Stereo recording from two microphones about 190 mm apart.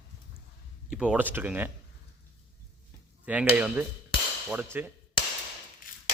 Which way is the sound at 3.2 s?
5° right (ahead or behind).